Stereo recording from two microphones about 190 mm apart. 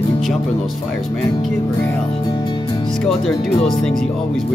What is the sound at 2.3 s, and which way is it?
Music, 25° left (ahead or behind).